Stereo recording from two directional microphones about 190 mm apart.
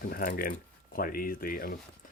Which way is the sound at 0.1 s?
50° left (ahead or behind).